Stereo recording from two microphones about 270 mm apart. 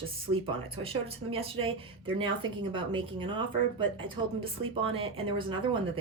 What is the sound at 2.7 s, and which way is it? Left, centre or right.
Speech, centre.